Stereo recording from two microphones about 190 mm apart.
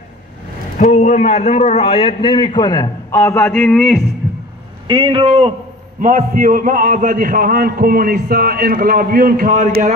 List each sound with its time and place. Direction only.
0.9 s a man's voice: 40° left (ahead or behind); by 4.0 s 5° left (ahead or behind)
4.8 s a man's voice: 25° right (ahead or behind)
5.9 s a man's voice: 40° right (ahead or behind)